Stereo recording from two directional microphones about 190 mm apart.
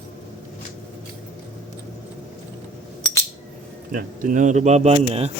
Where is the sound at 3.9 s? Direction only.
45° right (ahead or behind).